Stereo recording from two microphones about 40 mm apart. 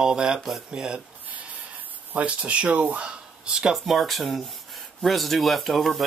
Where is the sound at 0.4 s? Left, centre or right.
Centre.